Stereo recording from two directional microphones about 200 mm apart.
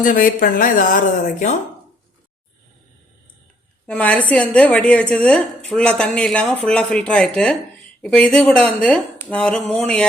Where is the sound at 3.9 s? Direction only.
5° left (ahead or behind).